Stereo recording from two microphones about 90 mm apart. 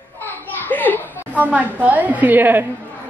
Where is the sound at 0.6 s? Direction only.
20° left (ahead or behind).